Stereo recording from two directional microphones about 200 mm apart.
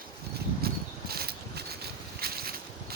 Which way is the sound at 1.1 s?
50° right (ahead or behind).